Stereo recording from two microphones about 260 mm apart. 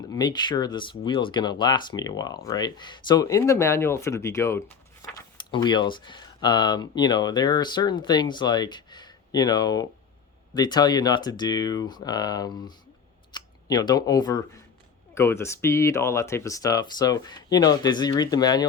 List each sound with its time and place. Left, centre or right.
0.1 s speech: centre